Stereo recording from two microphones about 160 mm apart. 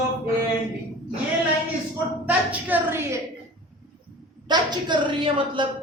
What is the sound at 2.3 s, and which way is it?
Speech, 10° right (ahead or behind).